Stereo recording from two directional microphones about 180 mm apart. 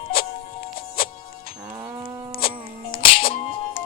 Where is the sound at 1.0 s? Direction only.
55° left (ahead or behind).